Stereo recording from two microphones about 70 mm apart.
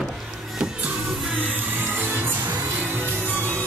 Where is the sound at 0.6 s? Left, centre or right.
Centre; by 3.6 s right.